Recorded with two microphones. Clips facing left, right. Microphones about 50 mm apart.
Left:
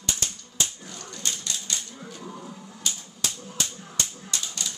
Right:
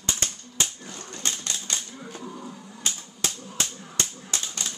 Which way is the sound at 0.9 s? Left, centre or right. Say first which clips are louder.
Right 1 dB; right.